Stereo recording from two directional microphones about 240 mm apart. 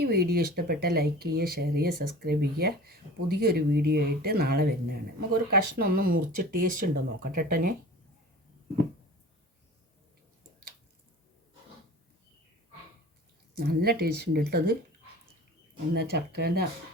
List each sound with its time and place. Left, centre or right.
0.0 s speech: right
13.7 s speech: right
16.0 s speech: right